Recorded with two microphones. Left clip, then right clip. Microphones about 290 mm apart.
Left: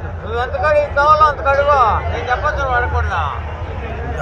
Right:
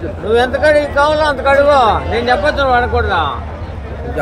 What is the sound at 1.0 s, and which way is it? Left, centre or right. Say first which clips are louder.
Vehicle: left 1 dB; right.